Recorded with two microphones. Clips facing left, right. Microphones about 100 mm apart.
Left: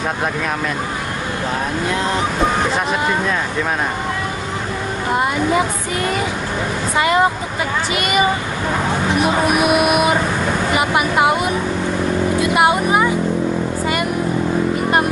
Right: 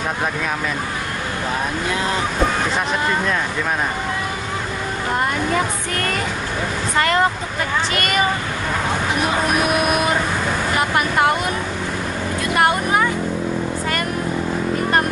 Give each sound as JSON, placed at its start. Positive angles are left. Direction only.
{"t": 5.1, "sound": "speech", "side_deg": 10}
{"t": 9.6, "sound": "speech", "side_deg": 10}
{"t": 12.4, "sound": "vehicle", "side_deg": 10}